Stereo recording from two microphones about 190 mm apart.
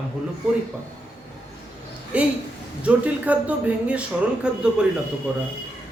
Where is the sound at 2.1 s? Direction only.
5° right (ahead or behind).